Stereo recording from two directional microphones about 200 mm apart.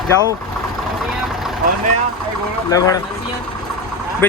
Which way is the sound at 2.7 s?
15° left (ahead or behind).